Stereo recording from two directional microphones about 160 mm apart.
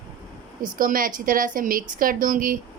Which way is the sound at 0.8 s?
60° right (ahead or behind).